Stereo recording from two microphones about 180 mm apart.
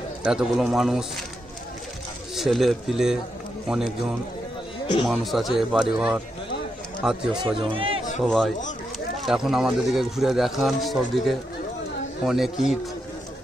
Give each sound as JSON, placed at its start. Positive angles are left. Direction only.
{"t": 0.2, "sound": "speech", "side_deg": -5}
{"t": 2.3, "sound": "speech", "side_deg": 0}
{"t": 5.0, "sound": "speech", "side_deg": 0}
{"t": 7.4, "sound": "speech", "side_deg": -30}
{"t": 8.2, "sound": "speech", "side_deg": 0}